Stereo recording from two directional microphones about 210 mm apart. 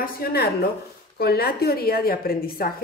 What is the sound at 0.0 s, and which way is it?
A woman's voice, 45° left (ahead or behind).